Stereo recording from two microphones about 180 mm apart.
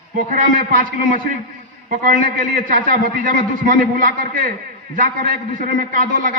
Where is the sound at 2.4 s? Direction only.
50° right (ahead or behind).